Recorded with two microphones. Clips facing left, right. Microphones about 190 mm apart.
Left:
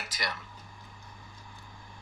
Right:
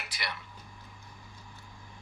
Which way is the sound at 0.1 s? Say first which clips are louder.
Left 3 dB; 40° left (ahead or behind).